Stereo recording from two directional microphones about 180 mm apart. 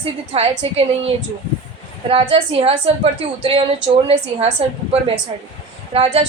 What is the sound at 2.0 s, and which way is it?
A woman's voice, 30° right (ahead or behind).